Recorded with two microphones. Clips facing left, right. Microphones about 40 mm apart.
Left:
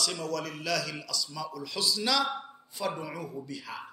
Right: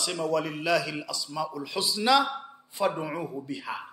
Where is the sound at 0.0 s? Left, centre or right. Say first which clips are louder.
Right 5 dB; right.